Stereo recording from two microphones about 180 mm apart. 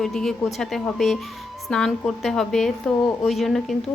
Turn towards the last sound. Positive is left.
turn(degrees=0)  # may be behind; listen again after turning